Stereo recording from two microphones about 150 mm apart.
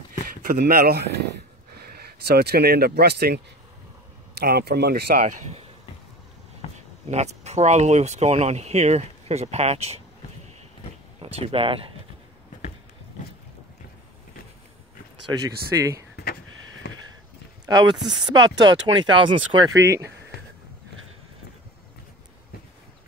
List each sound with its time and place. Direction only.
0.5 s speech: 85° right
4.4 s speech: 90° right
6.6 s a sound: 40° left (ahead or behind)
7.1 s speech: 50° right (ahead or behind)
11.1 s speech: 40° right (ahead or behind)
15.4 s speech: 20° right (ahead or behind)
16.8 s a sound: 90° left
17.6 s speech: 30° right (ahead or behind)